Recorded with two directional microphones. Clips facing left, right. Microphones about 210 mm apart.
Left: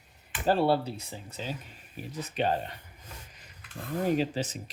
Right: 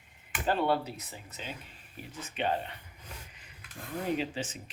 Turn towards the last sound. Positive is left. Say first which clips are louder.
# left 5 dB
turn(degrees=40)  # may be behind; listen again after turning